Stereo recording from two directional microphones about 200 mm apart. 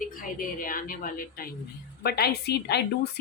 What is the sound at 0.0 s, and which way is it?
A woman's voice, 45° left (ahead or behind).